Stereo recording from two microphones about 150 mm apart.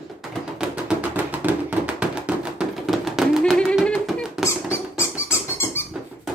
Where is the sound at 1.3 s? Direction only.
10° right (ahead or behind).